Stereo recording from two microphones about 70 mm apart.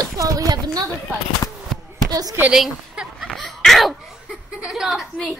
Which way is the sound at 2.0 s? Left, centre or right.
Right.